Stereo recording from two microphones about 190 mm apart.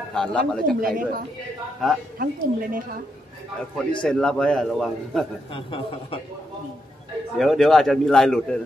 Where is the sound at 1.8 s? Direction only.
Centre (ahead or behind).